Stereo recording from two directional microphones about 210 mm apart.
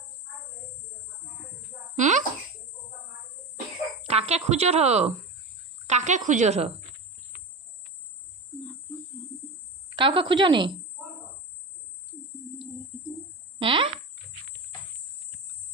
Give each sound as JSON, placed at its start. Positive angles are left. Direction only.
{"t": 2.0, "sound": "speech", "side_deg": -35}
{"t": 4.0, "sound": "speech", "side_deg": -30}
{"t": 9.9, "sound": "a woman's voice", "side_deg": -25}
{"t": 13.6, "sound": "speech", "side_deg": -25}